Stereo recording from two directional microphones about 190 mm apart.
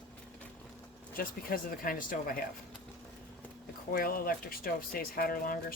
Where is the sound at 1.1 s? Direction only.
50° left (ahead or behind).